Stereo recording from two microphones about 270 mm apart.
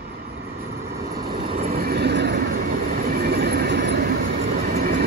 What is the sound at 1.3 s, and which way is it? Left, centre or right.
Vehicle, right.